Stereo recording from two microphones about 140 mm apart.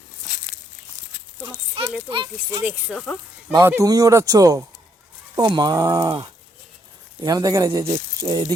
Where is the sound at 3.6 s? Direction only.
20° right (ahead or behind).